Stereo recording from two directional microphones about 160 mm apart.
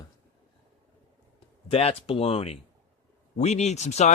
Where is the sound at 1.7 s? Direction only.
40° left (ahead or behind).